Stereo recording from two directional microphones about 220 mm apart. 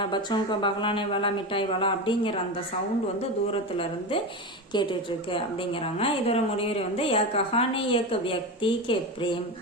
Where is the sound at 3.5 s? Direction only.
25° left (ahead or behind).